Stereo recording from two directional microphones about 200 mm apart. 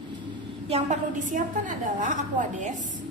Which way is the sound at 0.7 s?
35° right (ahead or behind).